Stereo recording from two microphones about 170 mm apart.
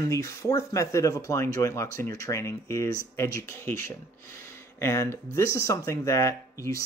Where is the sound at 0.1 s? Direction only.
15° left (ahead or behind).